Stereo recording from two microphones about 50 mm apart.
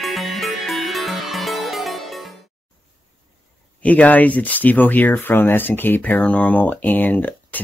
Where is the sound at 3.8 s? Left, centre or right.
Left.